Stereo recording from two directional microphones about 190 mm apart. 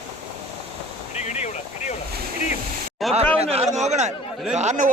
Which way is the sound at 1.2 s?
35° left (ahead or behind).